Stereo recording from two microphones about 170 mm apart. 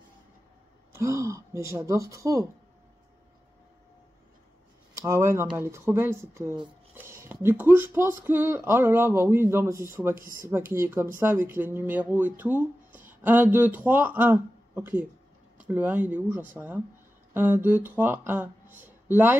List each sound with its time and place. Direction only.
0.9 s speech: 20° right (ahead or behind)
4.9 s speech: 15° right (ahead or behind)
7.0 s a sound: 15° right (ahead or behind)
7.4 s speech: 10° right (ahead or behind)
10.1 s speech: 55° right (ahead or behind)
10.7 s speech: 15° right (ahead or behind)